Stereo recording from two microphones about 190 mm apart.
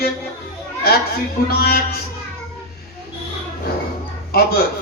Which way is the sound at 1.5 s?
55° left (ahead or behind).